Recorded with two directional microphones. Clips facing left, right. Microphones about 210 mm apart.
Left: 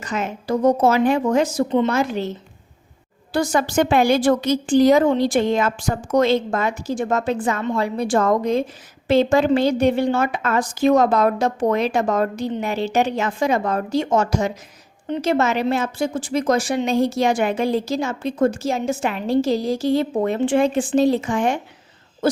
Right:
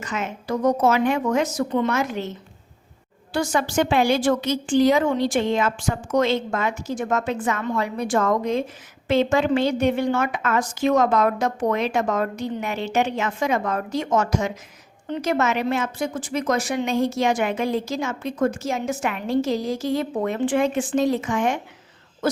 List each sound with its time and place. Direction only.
0.0 s a woman's voice: 35° left (ahead or behind)
3.3 s a woman's voice: 40° left (ahead or behind)
22.2 s owl: 30° left (ahead or behind)